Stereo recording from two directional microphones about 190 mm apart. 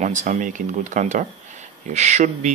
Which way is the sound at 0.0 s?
40° right (ahead or behind).